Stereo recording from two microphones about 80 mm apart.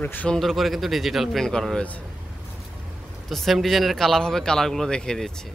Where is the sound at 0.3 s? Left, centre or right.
Centre.